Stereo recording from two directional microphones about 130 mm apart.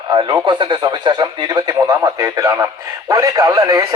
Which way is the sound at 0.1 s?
35° right (ahead or behind).